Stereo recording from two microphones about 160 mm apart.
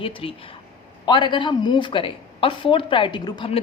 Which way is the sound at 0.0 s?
35° left (ahead or behind).